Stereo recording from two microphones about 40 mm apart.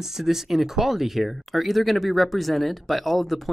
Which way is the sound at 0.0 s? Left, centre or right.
Centre.